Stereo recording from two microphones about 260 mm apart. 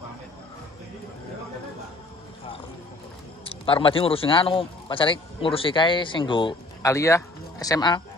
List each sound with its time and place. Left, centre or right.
3.4 s a man's voice: centre